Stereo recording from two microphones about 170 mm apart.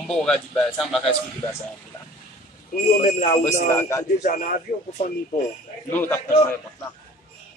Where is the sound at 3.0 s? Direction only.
50° left (ahead or behind).